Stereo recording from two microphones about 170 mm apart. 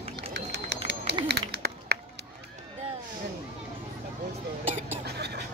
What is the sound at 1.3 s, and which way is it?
Run, 75° right (ahead or behind).